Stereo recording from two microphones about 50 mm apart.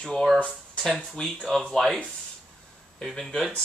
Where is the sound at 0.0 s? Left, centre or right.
Centre.